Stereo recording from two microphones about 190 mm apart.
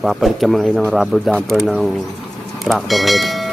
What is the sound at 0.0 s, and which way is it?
Speech, centre (ahead or behind).